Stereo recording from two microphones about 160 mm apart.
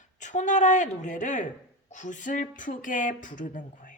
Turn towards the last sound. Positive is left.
turn(degrees=55)  # may be behind; listen again after turning